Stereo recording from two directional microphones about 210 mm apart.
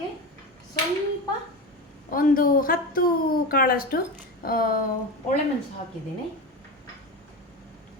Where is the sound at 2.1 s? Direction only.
40° left (ahead or behind).